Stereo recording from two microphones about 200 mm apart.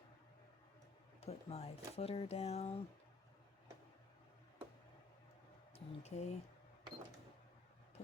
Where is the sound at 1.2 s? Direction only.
30° left (ahead or behind).